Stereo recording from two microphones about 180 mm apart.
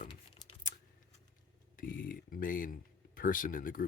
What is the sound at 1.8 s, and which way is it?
Speech, 50° left (ahead or behind).